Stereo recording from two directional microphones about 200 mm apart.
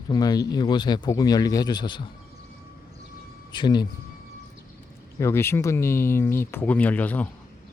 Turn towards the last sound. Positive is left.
turn(degrees=10)  # may be behind; listen again after turning